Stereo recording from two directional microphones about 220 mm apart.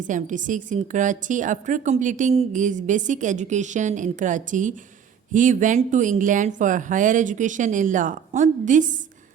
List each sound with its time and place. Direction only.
0.0 s a woman's voice: 35° right (ahead or behind)